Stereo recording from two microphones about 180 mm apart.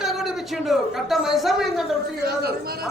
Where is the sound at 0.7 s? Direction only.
Centre (ahead or behind).